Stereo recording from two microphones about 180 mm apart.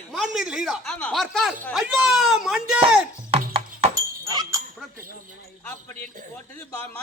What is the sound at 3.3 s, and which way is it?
Music, 35° right (ahead or behind).